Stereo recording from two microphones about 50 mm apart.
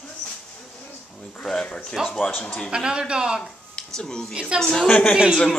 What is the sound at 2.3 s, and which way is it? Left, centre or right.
Speech, left.